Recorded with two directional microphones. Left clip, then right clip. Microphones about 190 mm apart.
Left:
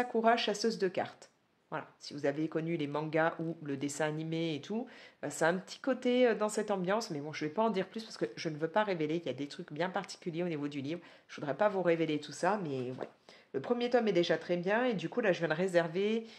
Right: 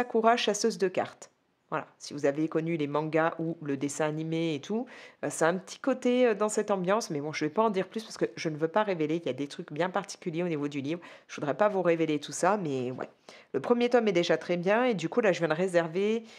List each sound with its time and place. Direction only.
0.0 s speech: 40° right (ahead or behind)